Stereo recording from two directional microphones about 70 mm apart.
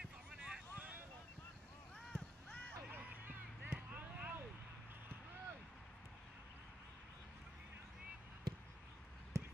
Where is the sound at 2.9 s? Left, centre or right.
Right.